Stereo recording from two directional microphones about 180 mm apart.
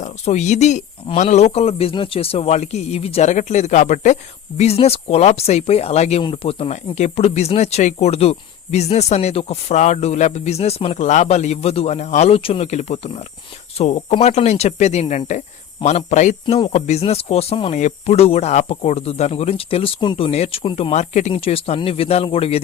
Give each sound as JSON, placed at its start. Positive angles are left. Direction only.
{"t": 0.0, "sound": "speech", "side_deg": 40}